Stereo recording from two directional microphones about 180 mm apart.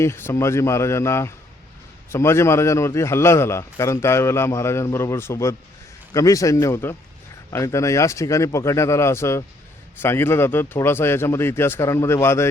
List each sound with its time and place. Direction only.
0.0 s a man's voice: 15° left (ahead or behind)